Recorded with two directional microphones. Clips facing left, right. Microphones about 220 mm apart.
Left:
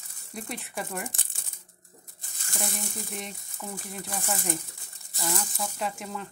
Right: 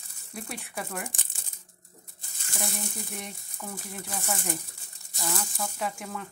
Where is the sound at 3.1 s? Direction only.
Centre (ahead or behind).